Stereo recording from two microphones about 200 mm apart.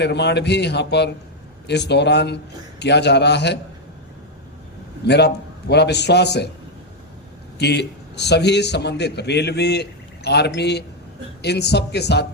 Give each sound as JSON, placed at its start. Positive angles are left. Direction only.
{"t": 0.0, "sound": "a man's voice", "side_deg": 60}
{"t": 5.0, "sound": "a man's voice", "side_deg": 55}
{"t": 7.6, "sound": "a man's voice", "side_deg": 55}